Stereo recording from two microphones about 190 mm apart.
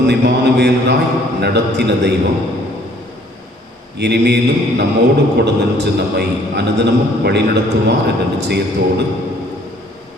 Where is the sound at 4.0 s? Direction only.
60° right (ahead or behind).